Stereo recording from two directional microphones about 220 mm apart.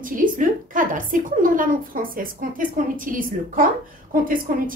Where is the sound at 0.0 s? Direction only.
35° right (ahead or behind).